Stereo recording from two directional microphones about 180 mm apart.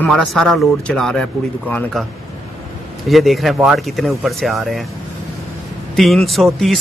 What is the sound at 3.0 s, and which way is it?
Speech, centre (ahead or behind).